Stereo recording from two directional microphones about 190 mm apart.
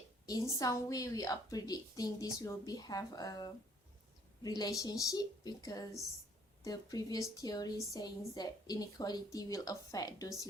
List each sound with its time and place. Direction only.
0.6 s a woman's voice: 20° left (ahead or behind)